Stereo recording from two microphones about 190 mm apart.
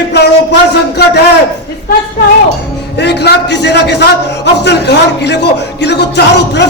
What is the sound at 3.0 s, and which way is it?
A man's voice, 60° left (ahead or behind).